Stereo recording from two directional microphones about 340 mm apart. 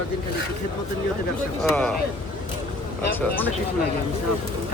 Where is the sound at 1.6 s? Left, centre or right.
Centre.